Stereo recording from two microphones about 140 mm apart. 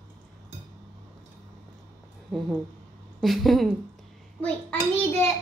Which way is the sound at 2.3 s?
5° left (ahead or behind).